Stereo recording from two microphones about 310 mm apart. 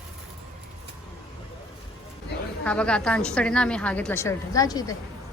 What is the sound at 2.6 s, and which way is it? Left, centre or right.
A woman's voice, centre.